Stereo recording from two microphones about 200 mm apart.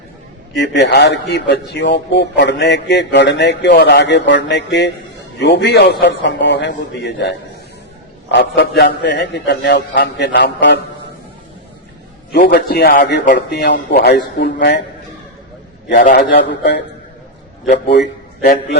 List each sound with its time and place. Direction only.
0.5 s a man's voice: 60° left (ahead or behind)
12.3 s a man's voice: 45° left (ahead or behind)
15.9 s a man's voice: 45° left (ahead or behind); by 16.8 s 60° left (ahead or behind)
18.4 s a man's voice: 50° left (ahead or behind)